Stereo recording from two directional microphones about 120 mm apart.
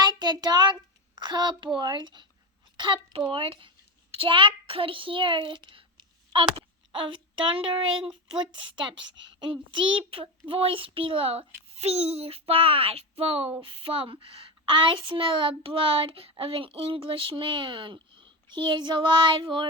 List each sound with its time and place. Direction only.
0.0 s a child's voice: 35° right (ahead or behind)